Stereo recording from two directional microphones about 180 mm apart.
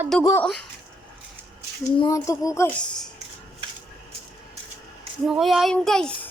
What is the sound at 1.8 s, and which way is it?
Speech, 20° left (ahead or behind).